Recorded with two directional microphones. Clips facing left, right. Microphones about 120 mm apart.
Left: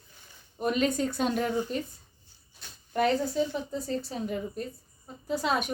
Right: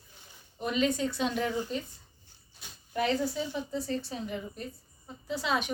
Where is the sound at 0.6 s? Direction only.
45° left (ahead or behind).